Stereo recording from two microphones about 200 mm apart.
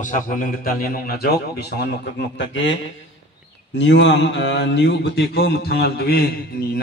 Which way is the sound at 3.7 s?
65° left (ahead or behind).